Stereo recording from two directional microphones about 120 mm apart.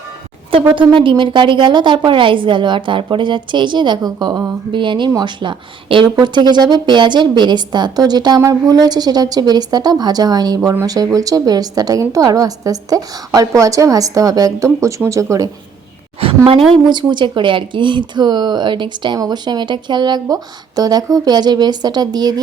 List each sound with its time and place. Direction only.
0.9 s a woman's voice: 45° right (ahead or behind); by 15.4 s 25° right (ahead or behind)
16.2 s a woman's voice: 50° right (ahead or behind)
16.7 s a woman's voice: 40° right (ahead or behind)